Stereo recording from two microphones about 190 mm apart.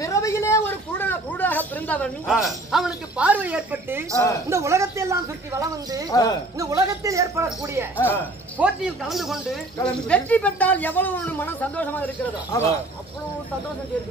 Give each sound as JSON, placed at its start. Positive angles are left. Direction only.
{"t": 0.0, "sound": "a sound", "side_deg": 15}
{"t": 4.5, "sound": "speech", "side_deg": -15}
{"t": 6.0, "sound": "speech", "side_deg": 20}
{"t": 6.6, "sound": "speech", "side_deg": -15}
{"t": 8.0, "sound": "speech", "side_deg": 10}
{"t": 8.5, "sound": "speech", "side_deg": -5}